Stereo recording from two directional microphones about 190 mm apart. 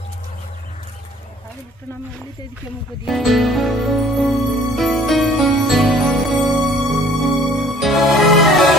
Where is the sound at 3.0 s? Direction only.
Centre (ahead or behind).